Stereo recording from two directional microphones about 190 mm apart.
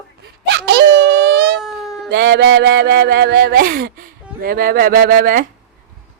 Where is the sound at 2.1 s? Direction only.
60° right (ahead or behind).